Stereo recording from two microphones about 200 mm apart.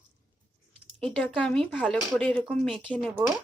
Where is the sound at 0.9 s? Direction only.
5° left (ahead or behind).